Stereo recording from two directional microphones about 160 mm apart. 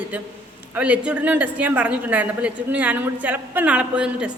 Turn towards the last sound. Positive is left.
turn(degrees=-5)  # may be behind; listen again after turning